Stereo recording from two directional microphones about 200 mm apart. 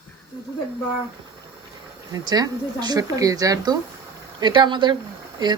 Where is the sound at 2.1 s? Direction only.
20° right (ahead or behind).